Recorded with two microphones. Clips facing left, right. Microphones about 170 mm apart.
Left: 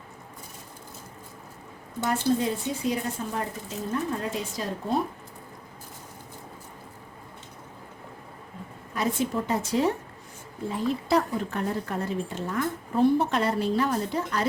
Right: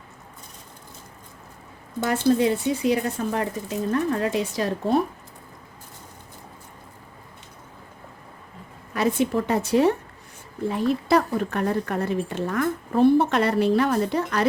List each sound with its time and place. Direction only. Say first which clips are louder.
2.0 s speech: right 5 dB; 75° right (ahead or behind)
9.0 s a woman's voice: right 5 dB; 70° right (ahead or behind)